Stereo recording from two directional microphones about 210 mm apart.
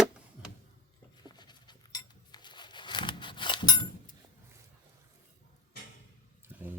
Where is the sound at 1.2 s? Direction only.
20° left (ahead or behind).